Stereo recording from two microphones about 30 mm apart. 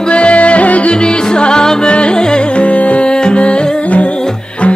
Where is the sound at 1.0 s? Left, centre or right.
Left.